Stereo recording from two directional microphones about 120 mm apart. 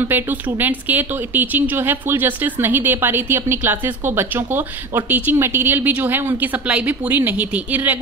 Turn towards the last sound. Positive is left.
turn(degrees=-15)  # may be behind; listen again after turning